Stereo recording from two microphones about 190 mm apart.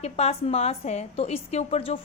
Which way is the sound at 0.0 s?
35° left (ahead or behind).